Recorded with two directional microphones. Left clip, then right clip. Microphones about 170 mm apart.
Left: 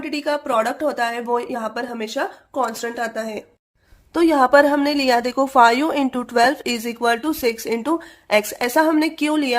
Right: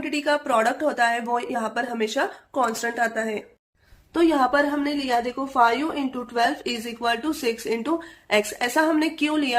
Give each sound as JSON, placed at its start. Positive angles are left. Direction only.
{"t": 0.0, "sound": "a woman's voice", "side_deg": 25}